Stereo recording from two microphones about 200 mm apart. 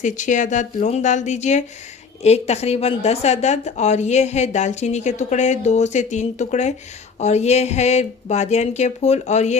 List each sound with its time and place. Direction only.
0.0 s a woman's voice: 40° left (ahead or behind)